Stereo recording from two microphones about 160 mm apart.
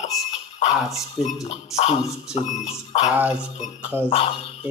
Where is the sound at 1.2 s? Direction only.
5° right (ahead or behind).